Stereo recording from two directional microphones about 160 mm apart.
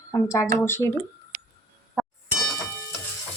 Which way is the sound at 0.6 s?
15° left (ahead or behind).